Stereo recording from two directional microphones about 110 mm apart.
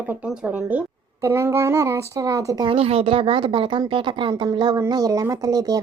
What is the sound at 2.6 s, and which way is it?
Speech, 55° right (ahead or behind).